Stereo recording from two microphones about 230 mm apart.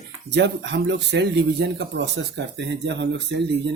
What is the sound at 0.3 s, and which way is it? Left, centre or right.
Speech, right.